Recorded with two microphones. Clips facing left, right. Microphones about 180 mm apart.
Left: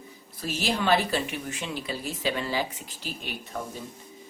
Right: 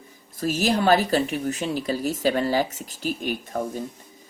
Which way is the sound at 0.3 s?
45° right (ahead or behind).